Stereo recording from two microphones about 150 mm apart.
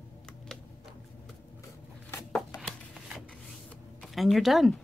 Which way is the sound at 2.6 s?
Centre (ahead or behind).